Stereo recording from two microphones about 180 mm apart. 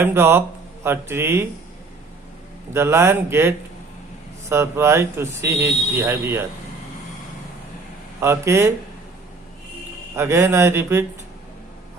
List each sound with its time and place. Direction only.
0.0 s speech: 15° right (ahead or behind)
2.7 s speech: 15° right (ahead or behind)
8.2 s speech: 15° right (ahead or behind)
10.2 s speech: 15° right (ahead or behind)